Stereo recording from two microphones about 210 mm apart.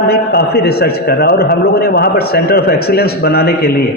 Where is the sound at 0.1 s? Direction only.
50° left (ahead or behind).